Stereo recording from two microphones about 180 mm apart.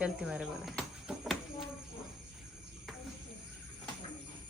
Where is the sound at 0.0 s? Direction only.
5° right (ahead or behind).